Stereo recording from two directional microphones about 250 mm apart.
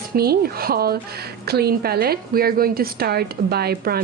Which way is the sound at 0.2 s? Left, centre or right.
Right.